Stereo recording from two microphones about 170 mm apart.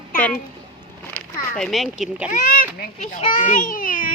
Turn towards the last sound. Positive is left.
turn(degrees=55)  # may be behind; listen again after turning